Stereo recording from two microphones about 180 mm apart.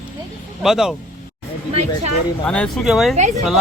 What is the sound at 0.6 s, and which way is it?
Speech, 5° right (ahead or behind).